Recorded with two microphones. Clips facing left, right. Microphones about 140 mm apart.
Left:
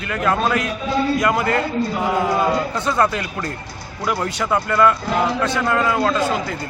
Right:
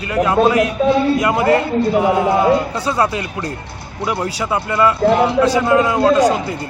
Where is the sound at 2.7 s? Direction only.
10° right (ahead or behind).